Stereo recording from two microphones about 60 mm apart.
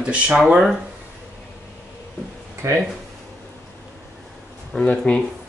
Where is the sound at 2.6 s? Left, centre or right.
Right.